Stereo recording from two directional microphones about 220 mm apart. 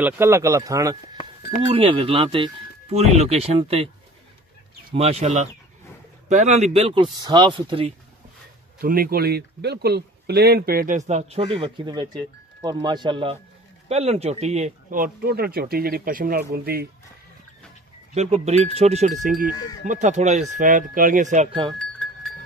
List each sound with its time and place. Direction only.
0.0 s speech: 10° right (ahead or behind)
1.7 s speech: 25° right (ahead or behind)
4.9 s speech: 30° right (ahead or behind)
8.8 s speech: 40° right (ahead or behind)
18.1 s speech: 30° right (ahead or behind)
19.5 s speech: 20° left (ahead or behind)
19.8 s speech: 35° right (ahead or behind)
21.7 s goat: 5° left (ahead or behind)